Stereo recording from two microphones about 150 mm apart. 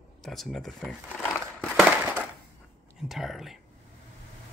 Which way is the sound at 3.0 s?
Centre (ahead or behind).